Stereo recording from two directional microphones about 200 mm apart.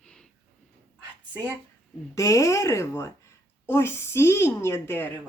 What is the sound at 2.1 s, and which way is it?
Speech, 15° left (ahead or behind).